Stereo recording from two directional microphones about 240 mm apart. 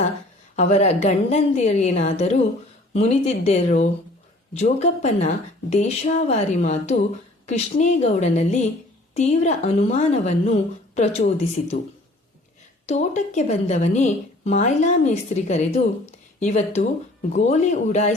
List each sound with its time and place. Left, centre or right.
0.5 s speech: left
12.8 s speech: left